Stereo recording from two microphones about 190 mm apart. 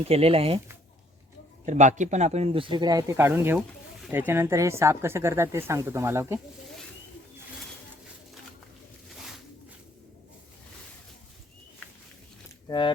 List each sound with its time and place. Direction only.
0.1 s speech: 30° right (ahead or behind)
1.6 s speech: 40° right (ahead or behind); by 6.4 s 15° right (ahead or behind)
12.6 s speech: 25° left (ahead or behind)